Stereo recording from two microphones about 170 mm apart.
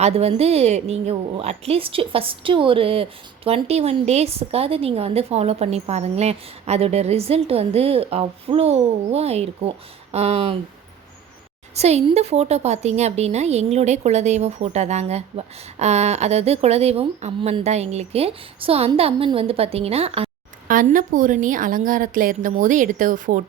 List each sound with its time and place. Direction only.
0.0 s a woman's voice: 35° right (ahead or behind)
11.7 s a woman's voice: 40° right (ahead or behind)
20.7 s a woman's voice: 50° right (ahead or behind)